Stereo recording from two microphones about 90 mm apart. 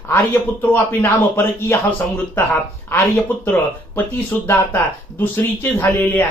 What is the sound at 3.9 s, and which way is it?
Speech, 25° left (ahead or behind).